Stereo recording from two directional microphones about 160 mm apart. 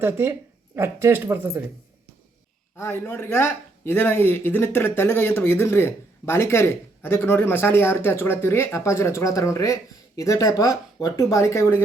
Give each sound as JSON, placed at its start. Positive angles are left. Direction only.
{"t": 0.0, "sound": "speech", "side_deg": -15}
{"t": 2.7, "sound": "speech", "side_deg": 15}